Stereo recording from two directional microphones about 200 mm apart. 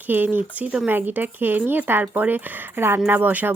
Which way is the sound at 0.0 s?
10° right (ahead or behind).